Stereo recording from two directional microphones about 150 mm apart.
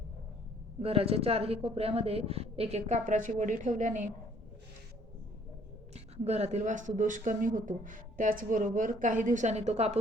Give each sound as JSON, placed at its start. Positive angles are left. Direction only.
{"t": 0.8, "sound": "a woman's voice", "side_deg": -40}
{"t": 5.9, "sound": "speech", "side_deg": -45}